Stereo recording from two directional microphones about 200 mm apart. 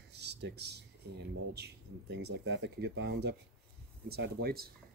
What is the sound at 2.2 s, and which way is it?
Speech, 60° right (ahead or behind).